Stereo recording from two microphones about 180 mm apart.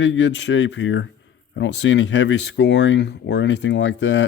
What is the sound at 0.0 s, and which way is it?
Speech, 90° left.